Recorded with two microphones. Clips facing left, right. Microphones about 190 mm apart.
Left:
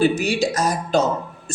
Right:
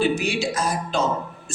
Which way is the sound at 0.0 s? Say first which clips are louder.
Left 3 dB; 40° left (ahead or behind).